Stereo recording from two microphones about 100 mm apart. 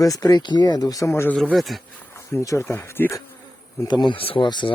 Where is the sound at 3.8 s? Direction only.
45° left (ahead or behind).